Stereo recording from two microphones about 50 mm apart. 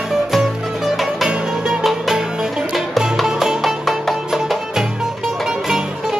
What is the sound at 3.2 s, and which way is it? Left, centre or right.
Music, centre.